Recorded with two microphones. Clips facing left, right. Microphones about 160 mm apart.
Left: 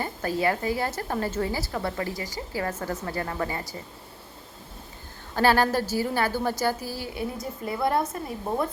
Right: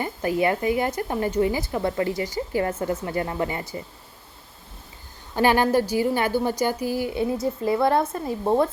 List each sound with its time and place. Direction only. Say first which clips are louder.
0.0 s a woman's voice: right 3 dB; 15° right (ahead or behind)
5.3 s a woman's voice: right 2 dB; 15° right (ahead or behind)